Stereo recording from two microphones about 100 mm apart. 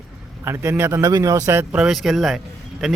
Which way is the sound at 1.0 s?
35° right (ahead or behind).